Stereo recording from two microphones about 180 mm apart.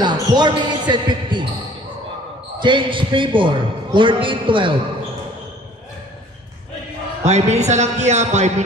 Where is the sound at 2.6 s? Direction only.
25° right (ahead or behind).